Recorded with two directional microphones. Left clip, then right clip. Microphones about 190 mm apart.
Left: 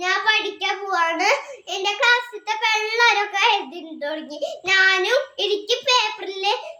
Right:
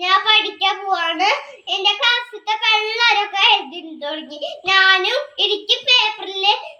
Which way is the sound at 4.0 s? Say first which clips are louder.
Even; 25° left (ahead or behind).